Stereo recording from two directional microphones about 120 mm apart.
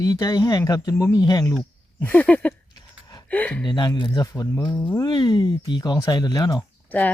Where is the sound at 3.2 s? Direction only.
10° left (ahead or behind).